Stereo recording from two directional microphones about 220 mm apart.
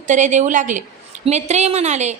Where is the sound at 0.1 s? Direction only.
35° right (ahead or behind).